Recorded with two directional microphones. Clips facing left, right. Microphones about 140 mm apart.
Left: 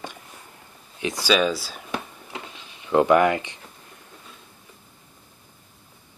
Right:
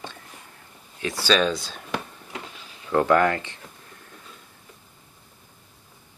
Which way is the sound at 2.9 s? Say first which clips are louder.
Left 2 dB; 15° left (ahead or behind).